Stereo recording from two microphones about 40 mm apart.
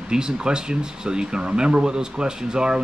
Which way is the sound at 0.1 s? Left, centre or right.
Right.